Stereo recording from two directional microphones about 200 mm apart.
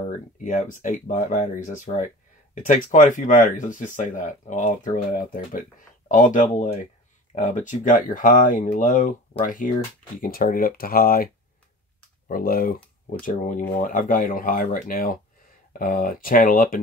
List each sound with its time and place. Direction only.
0.0 s speech: 40° left (ahead or behind)
12.3 s speech: 45° left (ahead or behind)